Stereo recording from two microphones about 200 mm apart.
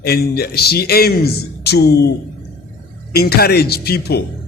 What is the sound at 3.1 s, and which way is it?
A man's voice, 50° left (ahead or behind).